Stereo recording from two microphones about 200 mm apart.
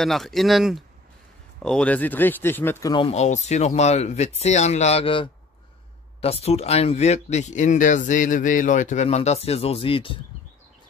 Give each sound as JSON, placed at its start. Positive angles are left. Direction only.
{"t": 0.0, "sound": "speech", "side_deg": 0}